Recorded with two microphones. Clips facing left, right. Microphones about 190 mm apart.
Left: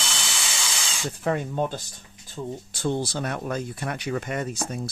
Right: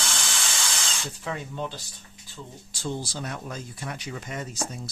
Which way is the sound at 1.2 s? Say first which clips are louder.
Left 8 dB; 55° left (ahead or behind).